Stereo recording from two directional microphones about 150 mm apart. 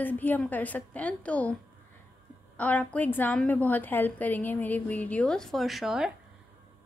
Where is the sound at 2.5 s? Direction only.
10° left (ahead or behind).